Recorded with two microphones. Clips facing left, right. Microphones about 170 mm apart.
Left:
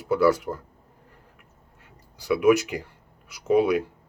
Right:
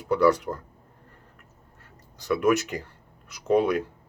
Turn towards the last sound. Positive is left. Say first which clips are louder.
# left 2 dB
turn(degrees=5)  # may be behind; listen again after turning